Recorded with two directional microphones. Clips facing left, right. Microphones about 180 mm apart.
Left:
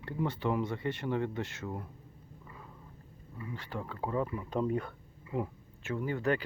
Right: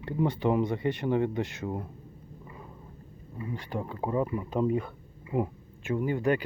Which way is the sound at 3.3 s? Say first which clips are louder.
Right 6 dB; 20° right (ahead or behind).